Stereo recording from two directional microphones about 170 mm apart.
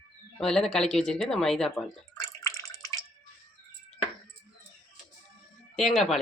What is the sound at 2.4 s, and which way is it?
Drip, 20° left (ahead or behind).